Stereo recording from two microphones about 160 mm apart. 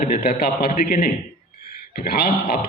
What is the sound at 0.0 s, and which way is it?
A man's voice, 65° left (ahead or behind).